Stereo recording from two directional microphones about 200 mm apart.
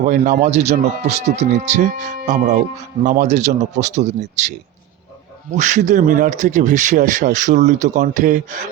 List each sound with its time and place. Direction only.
0.0 s speech: 40° right (ahead or behind)
5.5 s speech: 35° right (ahead or behind)